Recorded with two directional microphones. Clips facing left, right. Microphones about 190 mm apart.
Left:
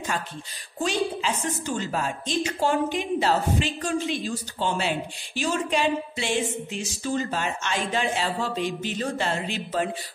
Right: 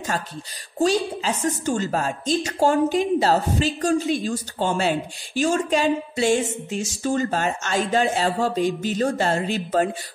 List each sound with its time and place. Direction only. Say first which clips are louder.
0.7 s a woman's voice: right 5 dB; 40° right (ahead or behind)